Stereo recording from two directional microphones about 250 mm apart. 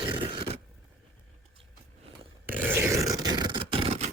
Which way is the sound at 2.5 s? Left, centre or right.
Centre.